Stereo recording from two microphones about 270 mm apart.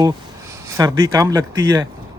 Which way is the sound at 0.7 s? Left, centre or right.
Centre.